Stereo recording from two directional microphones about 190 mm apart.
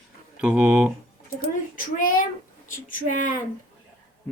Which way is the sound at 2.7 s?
45° left (ahead or behind).